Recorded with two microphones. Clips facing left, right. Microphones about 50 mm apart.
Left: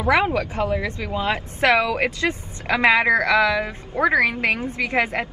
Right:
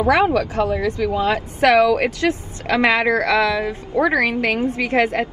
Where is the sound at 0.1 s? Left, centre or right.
Left.